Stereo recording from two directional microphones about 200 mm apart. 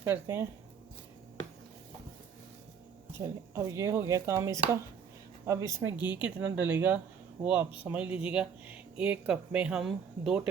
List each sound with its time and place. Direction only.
0.0 s speech: 10° right (ahead or behind)
3.2 s speech: 15° right (ahead or behind)